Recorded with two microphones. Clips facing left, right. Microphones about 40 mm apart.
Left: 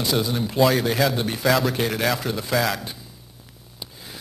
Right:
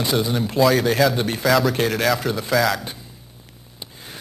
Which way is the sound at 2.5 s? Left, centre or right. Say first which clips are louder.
Right 4 dB; centre.